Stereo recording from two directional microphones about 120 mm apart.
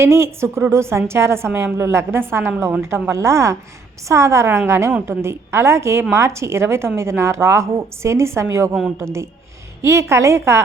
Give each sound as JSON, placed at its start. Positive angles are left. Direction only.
{"t": 0.0, "sound": "a woman's voice", "side_deg": -20}